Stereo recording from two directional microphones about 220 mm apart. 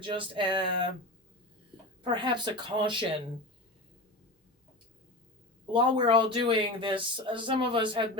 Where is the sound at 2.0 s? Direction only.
20° right (ahead or behind).